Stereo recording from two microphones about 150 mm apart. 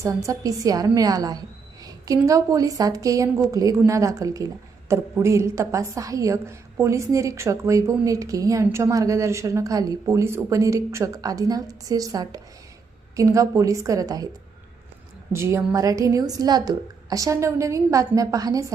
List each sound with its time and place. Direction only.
0.0 s a woman's voice: 20° right (ahead or behind)
15.3 s a woman's voice: 15° right (ahead or behind)